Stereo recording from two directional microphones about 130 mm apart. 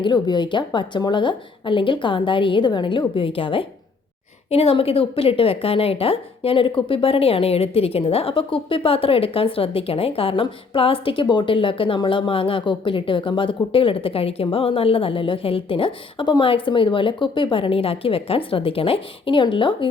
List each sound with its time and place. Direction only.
0.0 s a woman's voice: 35° left (ahead or behind)